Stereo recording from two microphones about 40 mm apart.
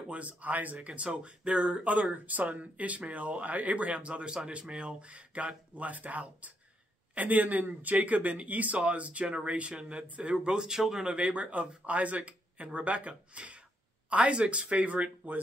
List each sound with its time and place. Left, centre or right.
0.1 s speech: right
10.3 s speech: right